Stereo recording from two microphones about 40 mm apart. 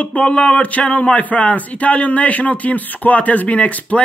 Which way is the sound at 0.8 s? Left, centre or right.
Left.